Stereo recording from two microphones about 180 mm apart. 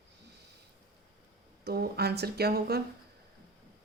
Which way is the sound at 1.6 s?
60° right (ahead or behind).